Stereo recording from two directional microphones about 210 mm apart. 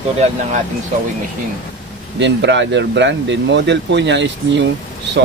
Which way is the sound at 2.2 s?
55° right (ahead or behind).